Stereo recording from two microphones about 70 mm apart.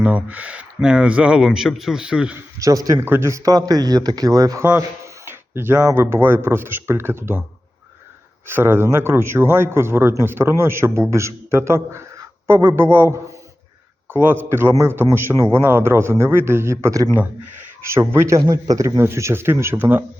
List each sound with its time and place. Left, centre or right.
0.0 s speech: right
2.6 s a man's voice: right
3.0 s speech: right
4.6 s speech: right
8.4 s speech: right
18.3 s speech: right
18.9 s speech: right